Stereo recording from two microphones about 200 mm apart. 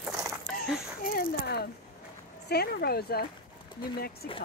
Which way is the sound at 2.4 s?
50° left (ahead or behind).